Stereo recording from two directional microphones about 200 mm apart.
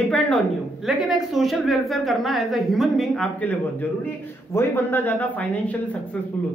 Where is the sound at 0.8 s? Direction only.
Centre (ahead or behind).